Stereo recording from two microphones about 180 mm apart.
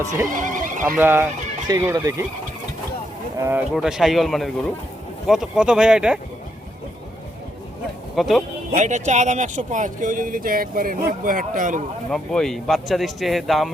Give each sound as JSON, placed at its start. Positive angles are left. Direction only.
{"t": 0.3, "sound": "speech", "side_deg": -45}
{"t": 0.9, "sound": "speech", "side_deg": -10}
{"t": 3.3, "sound": "speech", "side_deg": -15}
{"t": 3.8, "sound": "speech", "side_deg": -5}
{"t": 8.1, "sound": "speech", "side_deg": 0}
{"t": 8.7, "sound": "speech", "side_deg": -40}
{"t": 12.1, "sound": "speech", "side_deg": 5}